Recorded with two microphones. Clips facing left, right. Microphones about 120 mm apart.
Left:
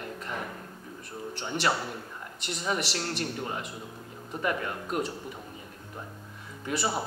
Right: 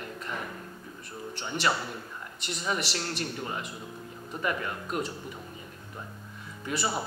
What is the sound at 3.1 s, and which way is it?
Speech, 40° left (ahead or behind).